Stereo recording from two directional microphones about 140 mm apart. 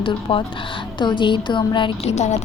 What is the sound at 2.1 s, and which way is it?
Speech, 55° left (ahead or behind).